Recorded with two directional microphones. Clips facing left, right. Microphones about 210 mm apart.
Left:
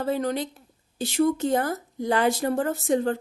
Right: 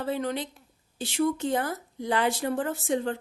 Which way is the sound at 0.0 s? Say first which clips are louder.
Left 4 dB; 40° left (ahead or behind).